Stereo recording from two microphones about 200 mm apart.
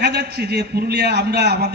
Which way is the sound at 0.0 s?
55° right (ahead or behind).